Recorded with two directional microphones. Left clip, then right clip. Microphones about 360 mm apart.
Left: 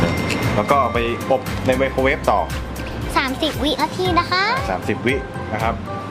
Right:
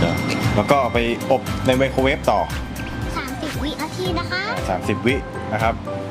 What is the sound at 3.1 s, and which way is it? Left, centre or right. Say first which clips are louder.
Music: left 9 dB; left.